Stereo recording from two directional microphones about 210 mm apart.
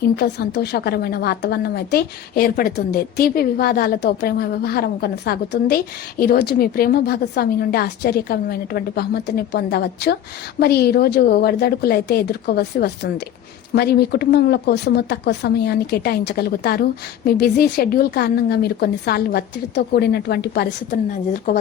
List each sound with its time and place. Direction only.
0.2 s a woman's voice: 50° left (ahead or behind)